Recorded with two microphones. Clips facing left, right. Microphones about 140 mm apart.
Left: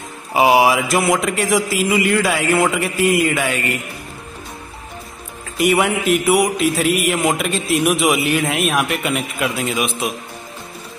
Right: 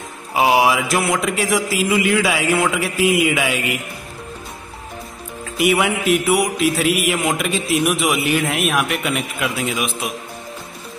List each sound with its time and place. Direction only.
0.3 s speech: centre (ahead or behind)
5.6 s speech: centre (ahead or behind)